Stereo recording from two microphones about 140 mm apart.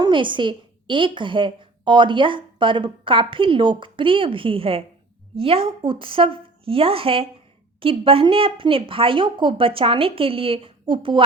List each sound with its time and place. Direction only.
0.0 s a woman's voice: 35° right (ahead or behind)